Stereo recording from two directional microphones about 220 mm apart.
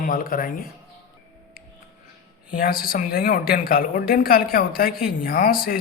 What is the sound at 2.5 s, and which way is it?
A woman's voice, 40° left (ahead or behind).